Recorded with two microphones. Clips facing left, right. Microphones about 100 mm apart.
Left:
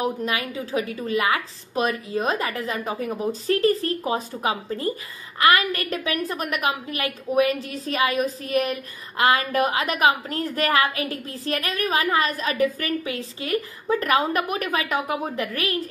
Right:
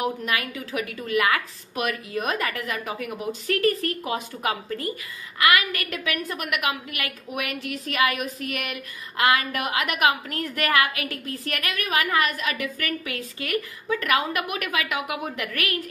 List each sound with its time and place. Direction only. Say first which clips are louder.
0.5 s a woman's voice: left 4 dB; 30° left (ahead or behind)